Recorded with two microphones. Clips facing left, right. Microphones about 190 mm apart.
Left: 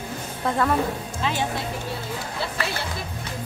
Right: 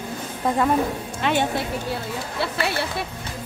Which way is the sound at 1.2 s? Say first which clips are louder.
Right 5 dB; 65° right (ahead or behind).